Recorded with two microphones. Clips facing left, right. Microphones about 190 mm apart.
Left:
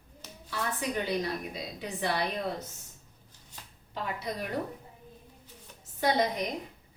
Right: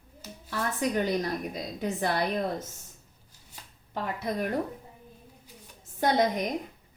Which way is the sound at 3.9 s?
55° right (ahead or behind).